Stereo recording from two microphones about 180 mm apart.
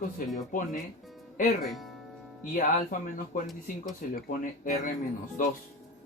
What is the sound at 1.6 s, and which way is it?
Speech, centre (ahead or behind).